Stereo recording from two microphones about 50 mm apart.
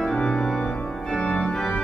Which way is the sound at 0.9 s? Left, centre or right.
Centre.